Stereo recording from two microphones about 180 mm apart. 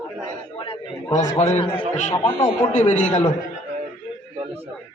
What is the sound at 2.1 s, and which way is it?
Speech, 20° left (ahead or behind).